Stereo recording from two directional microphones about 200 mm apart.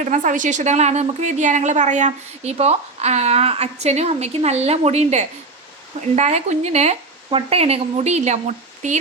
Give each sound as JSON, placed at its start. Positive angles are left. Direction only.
{"t": 0.0, "sound": "a woman's voice", "side_deg": -40}